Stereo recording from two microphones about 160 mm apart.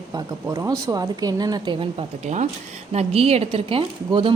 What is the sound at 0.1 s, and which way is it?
A woman's voice, 20° right (ahead or behind).